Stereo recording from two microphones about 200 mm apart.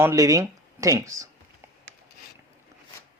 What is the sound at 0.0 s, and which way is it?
Speech, 15° right (ahead or behind).